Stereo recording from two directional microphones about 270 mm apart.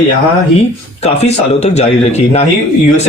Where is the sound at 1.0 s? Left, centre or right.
Left.